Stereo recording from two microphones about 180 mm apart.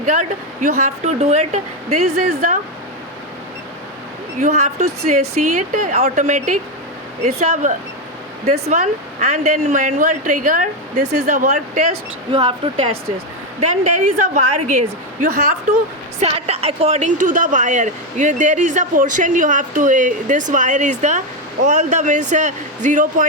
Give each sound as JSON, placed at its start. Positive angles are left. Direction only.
{"t": 0.0, "sound": "speech", "side_deg": -40}
{"t": 4.4, "sound": "speech", "side_deg": -40}
{"t": 8.7, "sound": "speech", "side_deg": -40}
{"t": 12.3, "sound": "speech", "side_deg": -25}
{"t": 13.6, "sound": "speech", "side_deg": -40}
{"t": 16.2, "sound": "a woman's voice", "side_deg": -35}